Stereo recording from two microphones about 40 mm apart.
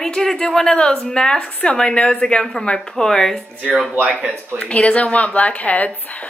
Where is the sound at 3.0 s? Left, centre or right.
Centre.